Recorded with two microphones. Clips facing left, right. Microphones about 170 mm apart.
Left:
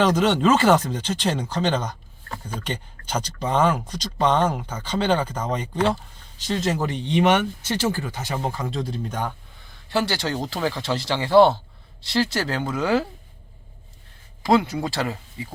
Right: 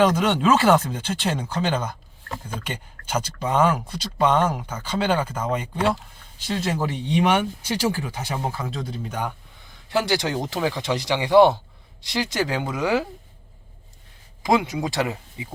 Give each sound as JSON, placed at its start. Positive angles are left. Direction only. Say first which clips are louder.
{"t": 0.0, "sound": "speech", "louder": "even", "side_deg": -10}
{"t": 9.9, "sound": "speech", "louder": "right 1 dB", "side_deg": -20}
{"t": 14.4, "sound": "speech", "louder": "left 1 dB", "side_deg": -15}